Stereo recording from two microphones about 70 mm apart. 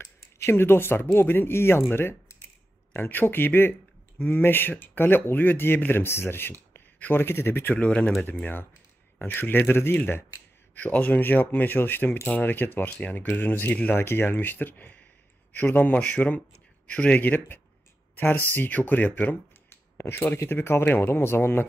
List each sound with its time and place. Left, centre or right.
0.0 s speech: left
9.2 s speech: left
20.0 s speech: left